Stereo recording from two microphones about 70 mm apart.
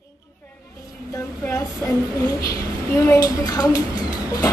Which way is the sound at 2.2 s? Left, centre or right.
Left.